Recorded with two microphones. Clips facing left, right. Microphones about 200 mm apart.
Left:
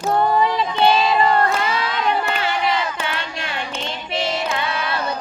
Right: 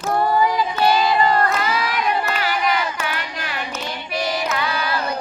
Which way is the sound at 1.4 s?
25° left (ahead or behind).